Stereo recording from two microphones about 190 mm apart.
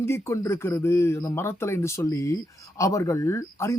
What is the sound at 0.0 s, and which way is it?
Speech, 15° left (ahead or behind).